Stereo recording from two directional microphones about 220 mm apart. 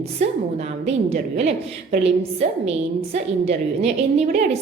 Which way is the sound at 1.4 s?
30° right (ahead or behind).